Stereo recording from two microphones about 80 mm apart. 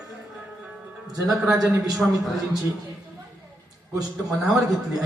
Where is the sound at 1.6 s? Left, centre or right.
Right.